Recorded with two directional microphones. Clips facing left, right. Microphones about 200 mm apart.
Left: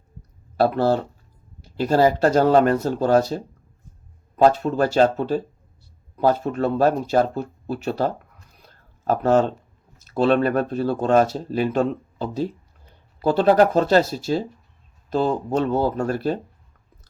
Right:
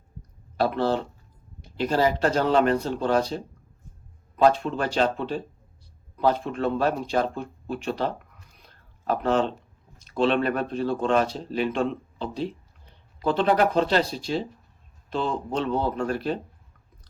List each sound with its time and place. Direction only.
0.6 s speech: 45° left (ahead or behind)
4.5 s speech: 40° left (ahead or behind)